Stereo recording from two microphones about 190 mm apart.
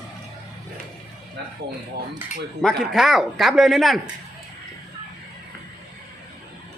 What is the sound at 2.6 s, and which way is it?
Speech, centre (ahead or behind).